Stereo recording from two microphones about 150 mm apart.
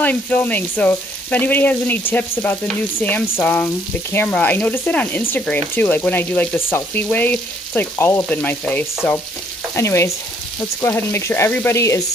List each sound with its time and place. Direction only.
0.0 s frying: 10° left (ahead or behind)
9.8 s frying: 20° left (ahead or behind)